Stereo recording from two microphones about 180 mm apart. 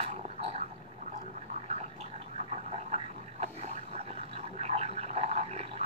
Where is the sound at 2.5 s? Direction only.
35° right (ahead or behind).